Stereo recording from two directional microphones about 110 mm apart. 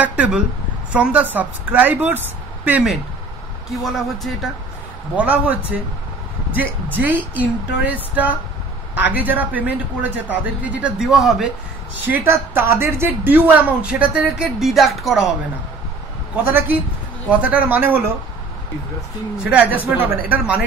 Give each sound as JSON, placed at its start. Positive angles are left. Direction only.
{"t": 0.0, "sound": "a woman's voice", "side_deg": -15}
{"t": 3.8, "sound": "speech", "side_deg": 0}
{"t": 5.1, "sound": "a woman's voice", "side_deg": -15}
{"t": 12.0, "sound": "a woman's voice", "side_deg": -20}
{"t": 16.4, "sound": "a woman's voice", "side_deg": -20}
{"t": 19.3, "sound": "a woman's voice", "side_deg": -10}